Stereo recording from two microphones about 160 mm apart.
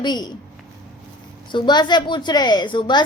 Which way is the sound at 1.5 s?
30° left (ahead or behind).